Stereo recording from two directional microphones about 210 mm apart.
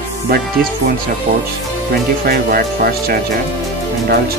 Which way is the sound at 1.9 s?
45° right (ahead or behind).